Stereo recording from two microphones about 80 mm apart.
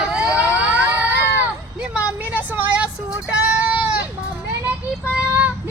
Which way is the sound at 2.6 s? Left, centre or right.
Centre.